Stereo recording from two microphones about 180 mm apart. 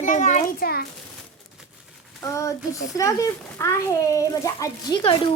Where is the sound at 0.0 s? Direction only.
40° left (ahead or behind).